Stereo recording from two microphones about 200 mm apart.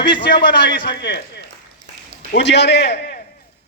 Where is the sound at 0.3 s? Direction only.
50° left (ahead or behind).